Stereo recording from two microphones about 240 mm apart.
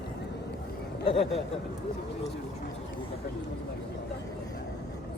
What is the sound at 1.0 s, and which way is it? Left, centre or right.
Speech, left.